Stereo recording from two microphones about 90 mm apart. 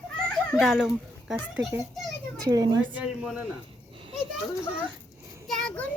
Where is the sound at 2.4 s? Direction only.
45° right (ahead or behind).